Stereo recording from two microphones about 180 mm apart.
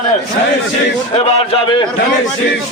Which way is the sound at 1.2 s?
35° left (ahead or behind).